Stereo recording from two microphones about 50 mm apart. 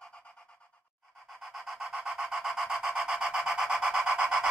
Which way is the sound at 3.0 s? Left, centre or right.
Centre.